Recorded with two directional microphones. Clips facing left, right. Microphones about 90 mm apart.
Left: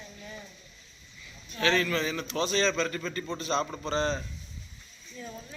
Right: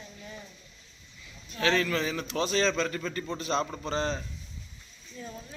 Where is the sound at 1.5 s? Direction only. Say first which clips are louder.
Even; 5° right (ahead or behind).